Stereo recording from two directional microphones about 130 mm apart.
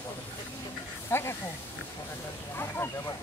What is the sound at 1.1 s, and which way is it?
Speech, 20° left (ahead or behind).